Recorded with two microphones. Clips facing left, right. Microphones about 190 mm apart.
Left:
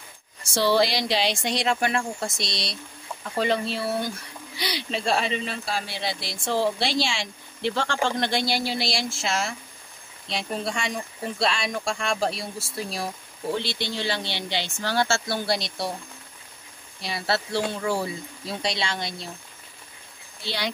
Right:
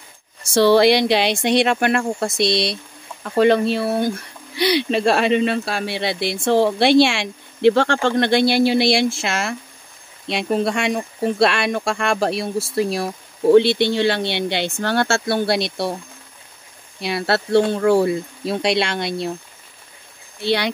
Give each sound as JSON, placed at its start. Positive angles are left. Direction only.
{"t": 0.6, "sound": "speech", "side_deg": -65}
{"t": 17.0, "sound": "speech", "side_deg": -65}
{"t": 20.3, "sound": "speech", "side_deg": -65}